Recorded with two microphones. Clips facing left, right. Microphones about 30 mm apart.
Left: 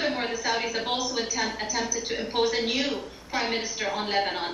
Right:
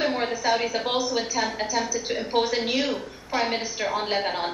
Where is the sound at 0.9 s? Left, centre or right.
Centre.